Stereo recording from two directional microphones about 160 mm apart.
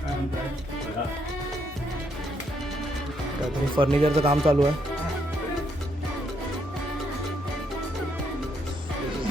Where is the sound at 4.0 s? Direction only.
40° right (ahead or behind).